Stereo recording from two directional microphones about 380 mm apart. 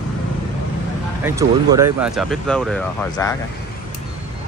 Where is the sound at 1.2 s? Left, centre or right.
Centre.